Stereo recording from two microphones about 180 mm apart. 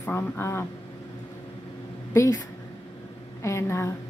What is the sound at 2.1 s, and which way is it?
Speech, 15° left (ahead or behind).